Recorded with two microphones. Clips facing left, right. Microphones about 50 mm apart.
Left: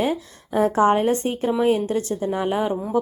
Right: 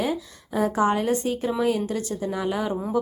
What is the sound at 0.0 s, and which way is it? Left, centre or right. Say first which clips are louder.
A woman's voice: left 3 dB; left.